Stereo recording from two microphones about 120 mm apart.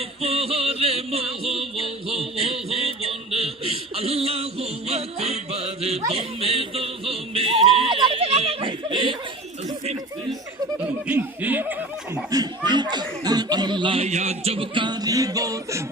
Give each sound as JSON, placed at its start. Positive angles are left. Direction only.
{"t": 0.2, "sound": "music", "side_deg": -55}
{"t": 11.0, "sound": "speech", "side_deg": -15}
{"t": 12.3, "sound": "chuckle", "side_deg": -35}
{"t": 14.1, "sound": "music", "side_deg": -70}